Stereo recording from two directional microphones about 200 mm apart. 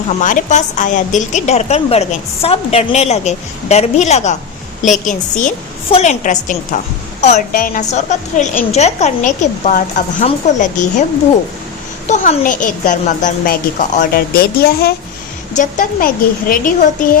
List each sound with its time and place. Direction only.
0.2 s a woman's voice: 40° left (ahead or behind)
12.0 s a woman's voice: 35° left (ahead or behind)
15.5 s a woman's voice: 40° left (ahead or behind)